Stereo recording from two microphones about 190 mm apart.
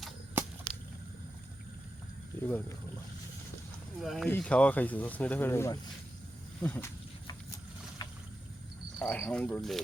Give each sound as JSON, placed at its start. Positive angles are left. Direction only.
{"t": 0.4, "sound": "a sound", "side_deg": -10}
{"t": 2.4, "sound": "speech", "side_deg": 10}
{"t": 4.0, "sound": "speech", "side_deg": 0}
{"t": 6.6, "sound": "a sound", "side_deg": 10}
{"t": 8.0, "sound": "boat", "side_deg": 20}
{"t": 9.0, "sound": "speech", "side_deg": 5}